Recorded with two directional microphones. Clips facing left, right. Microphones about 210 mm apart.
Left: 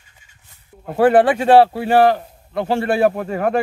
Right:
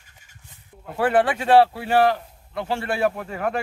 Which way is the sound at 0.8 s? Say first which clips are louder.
Left 7 dB; 35° left (ahead or behind).